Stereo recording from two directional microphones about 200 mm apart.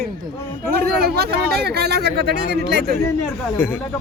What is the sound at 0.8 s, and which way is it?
Speech, 50° right (ahead or behind).